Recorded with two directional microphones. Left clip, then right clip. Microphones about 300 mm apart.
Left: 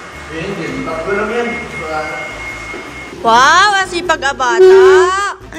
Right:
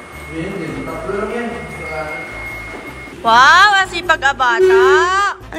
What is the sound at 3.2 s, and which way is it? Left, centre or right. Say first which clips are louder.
A woman's voice: even; centre.